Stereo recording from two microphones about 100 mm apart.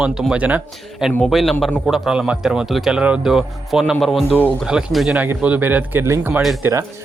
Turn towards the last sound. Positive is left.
turn(degrees=-30)  # may be behind; listen again after turning